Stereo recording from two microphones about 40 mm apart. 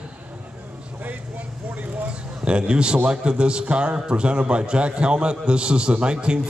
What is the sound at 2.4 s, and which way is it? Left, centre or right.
A man's voice, right.